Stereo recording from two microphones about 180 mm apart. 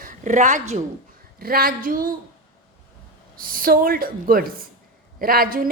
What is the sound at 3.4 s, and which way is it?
A woman's voice, 50° right (ahead or behind).